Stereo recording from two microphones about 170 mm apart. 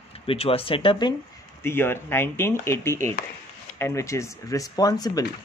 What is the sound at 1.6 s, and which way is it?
Speech, 15° left (ahead or behind).